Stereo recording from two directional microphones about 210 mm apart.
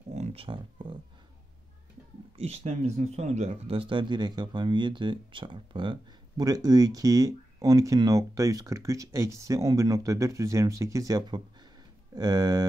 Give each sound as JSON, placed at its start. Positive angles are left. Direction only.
{"t": 0.1, "sound": "speech", "side_deg": -30}
{"t": 2.3, "sound": "speech", "side_deg": -30}